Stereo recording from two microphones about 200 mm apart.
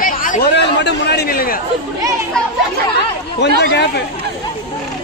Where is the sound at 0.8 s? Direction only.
55° left (ahead or behind).